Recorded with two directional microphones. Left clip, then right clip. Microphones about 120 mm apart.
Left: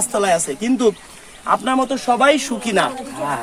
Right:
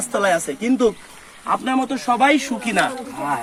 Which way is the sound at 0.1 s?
55° left (ahead or behind).